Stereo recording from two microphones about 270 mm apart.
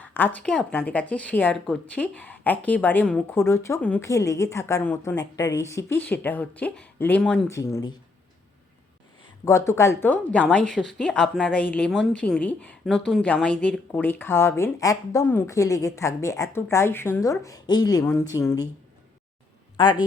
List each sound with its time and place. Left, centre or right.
0.0 s speech: centre
9.4 s speech: centre
19.7 s a woman's voice: centre